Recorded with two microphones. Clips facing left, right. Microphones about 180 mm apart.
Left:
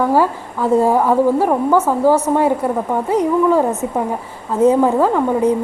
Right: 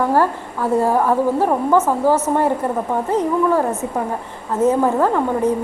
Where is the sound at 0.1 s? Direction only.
15° left (ahead or behind).